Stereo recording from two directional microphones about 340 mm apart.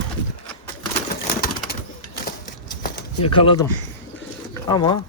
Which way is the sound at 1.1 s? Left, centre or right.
Left.